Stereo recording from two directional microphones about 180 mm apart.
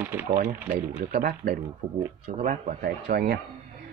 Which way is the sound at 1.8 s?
40° right (ahead or behind).